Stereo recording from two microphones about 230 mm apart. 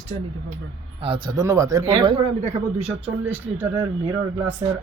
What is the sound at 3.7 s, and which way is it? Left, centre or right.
Speech, centre.